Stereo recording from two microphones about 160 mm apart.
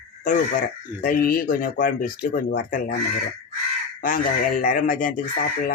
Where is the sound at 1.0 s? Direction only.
65° left (ahead or behind).